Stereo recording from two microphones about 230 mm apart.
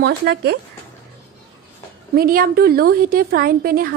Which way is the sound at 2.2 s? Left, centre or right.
Right.